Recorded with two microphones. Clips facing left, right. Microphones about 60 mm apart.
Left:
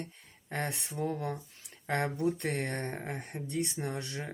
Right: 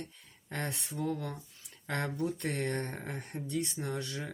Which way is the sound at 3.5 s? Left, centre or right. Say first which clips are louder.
Left 1 dB; left.